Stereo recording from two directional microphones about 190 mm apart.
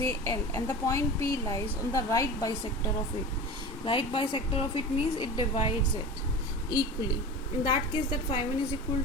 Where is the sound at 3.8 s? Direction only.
25° left (ahead or behind).